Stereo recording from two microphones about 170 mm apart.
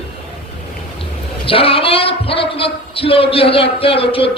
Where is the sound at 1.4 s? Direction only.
35° left (ahead or behind).